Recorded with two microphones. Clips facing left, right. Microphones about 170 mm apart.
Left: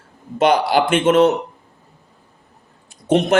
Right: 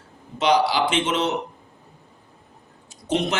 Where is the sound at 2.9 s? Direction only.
55° left (ahead or behind).